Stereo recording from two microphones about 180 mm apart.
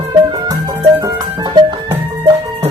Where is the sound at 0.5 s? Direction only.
20° right (ahead or behind).